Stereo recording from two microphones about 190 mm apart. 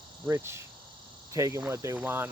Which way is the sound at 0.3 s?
15° right (ahead or behind).